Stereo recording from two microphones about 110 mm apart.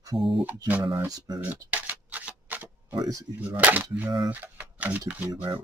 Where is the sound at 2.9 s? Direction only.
35° right (ahead or behind).